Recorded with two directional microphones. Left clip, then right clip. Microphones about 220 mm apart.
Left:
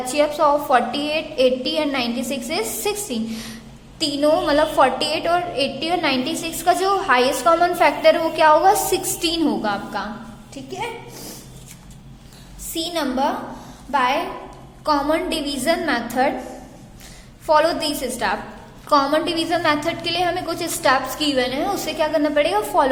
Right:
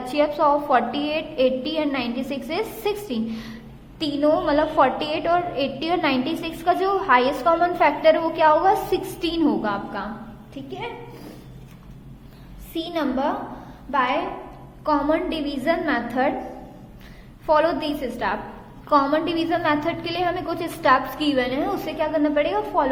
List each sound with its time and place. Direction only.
0.1 s a woman's voice: 5° left (ahead or behind)
12.7 s a woman's voice: 5° left (ahead or behind)
17.4 s a woman's voice: 5° left (ahead or behind)